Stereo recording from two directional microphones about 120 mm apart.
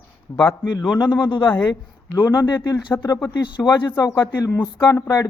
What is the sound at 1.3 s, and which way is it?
A woman's voice, 40° left (ahead or behind).